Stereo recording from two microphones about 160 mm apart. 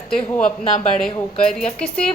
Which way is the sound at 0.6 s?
45° left (ahead or behind).